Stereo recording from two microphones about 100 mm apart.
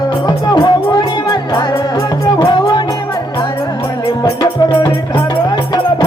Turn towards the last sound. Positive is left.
turn(degrees=50)  # may be behind; listen again after turning